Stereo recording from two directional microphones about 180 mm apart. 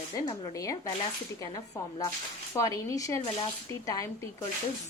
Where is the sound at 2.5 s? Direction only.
15° left (ahead or behind).